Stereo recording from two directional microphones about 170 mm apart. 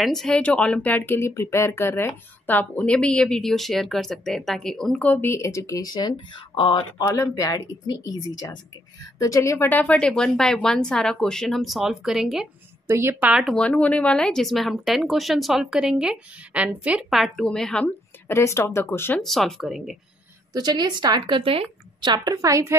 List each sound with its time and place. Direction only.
0.0 s speech: centre (ahead or behind)
12.8 s speech: 15° right (ahead or behind); by 17.8 s 5° left (ahead or behind)
18.3 s speech: 15° left (ahead or behind)
19.2 s speech: centre (ahead or behind)
20.5 s a woman's voice: 25° right (ahead or behind)